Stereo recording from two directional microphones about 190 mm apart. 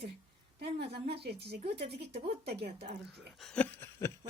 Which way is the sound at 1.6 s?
30° right (ahead or behind).